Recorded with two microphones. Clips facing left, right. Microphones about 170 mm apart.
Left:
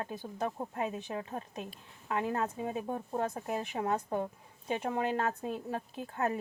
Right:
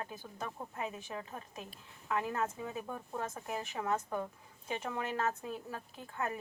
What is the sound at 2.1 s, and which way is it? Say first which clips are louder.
Speech: left 2 dB; 35° left (ahead or behind).